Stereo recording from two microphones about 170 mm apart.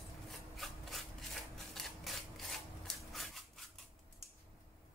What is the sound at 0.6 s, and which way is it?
Rub, centre (ahead or behind).